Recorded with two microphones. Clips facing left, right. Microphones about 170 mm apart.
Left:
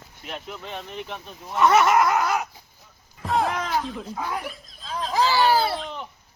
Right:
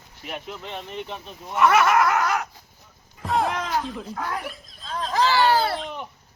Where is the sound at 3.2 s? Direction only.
Centre (ahead or behind).